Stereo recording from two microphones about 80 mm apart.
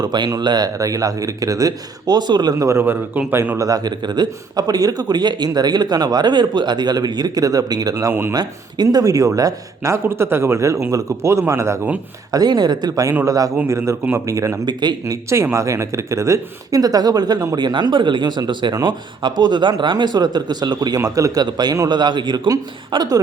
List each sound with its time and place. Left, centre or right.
0.0 s a man's voice: right
2.6 s a man's voice: right
2.8 s a man's voice: right
3.6 s a man's voice: right
9.9 s a man's voice: right
12.3 s a man's voice: right
13.2 s speech: right
13.7 s a man's voice: right
14.6 s a man's voice: right
15.0 s a man's voice: right
18.7 s a man's voice: right
21.0 s speech: right
21.4 s a man's voice: right
22.9 s a man's voice: right